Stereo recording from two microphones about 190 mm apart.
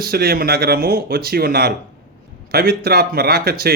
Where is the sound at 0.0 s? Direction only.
55° right (ahead or behind).